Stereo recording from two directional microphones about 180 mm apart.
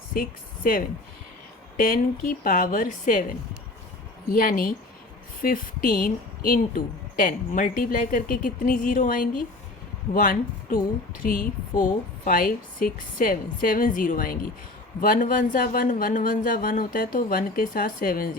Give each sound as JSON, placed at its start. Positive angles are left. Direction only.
{"t": 0.1, "sound": "a woman's voice", "side_deg": 55}
{"t": 4.3, "sound": "a woman's voice", "side_deg": 50}